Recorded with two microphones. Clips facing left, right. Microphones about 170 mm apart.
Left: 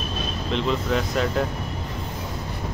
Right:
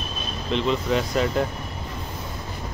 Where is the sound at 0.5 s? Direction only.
Centre (ahead or behind).